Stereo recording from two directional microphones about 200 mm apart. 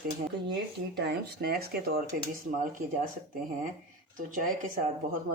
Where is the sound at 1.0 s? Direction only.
55° right (ahead or behind).